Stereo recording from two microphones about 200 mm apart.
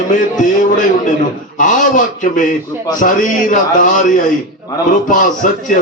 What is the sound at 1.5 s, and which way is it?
A man's voice, 40° left (ahead or behind).